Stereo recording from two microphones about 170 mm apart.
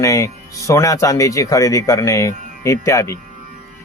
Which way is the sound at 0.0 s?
20° left (ahead or behind).